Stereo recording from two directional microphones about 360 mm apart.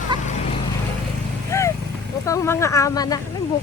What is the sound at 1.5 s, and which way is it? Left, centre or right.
Vehicle, centre.